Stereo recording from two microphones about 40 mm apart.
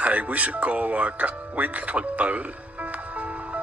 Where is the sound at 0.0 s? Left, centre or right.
Right.